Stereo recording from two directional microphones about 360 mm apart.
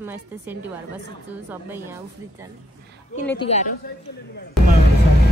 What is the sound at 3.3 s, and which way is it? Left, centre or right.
Speech, centre.